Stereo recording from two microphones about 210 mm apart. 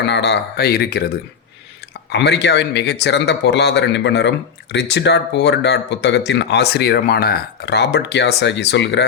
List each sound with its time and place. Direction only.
0.1 s speech: 55° left (ahead or behind)
2.0 s speech: 55° left (ahead or behind)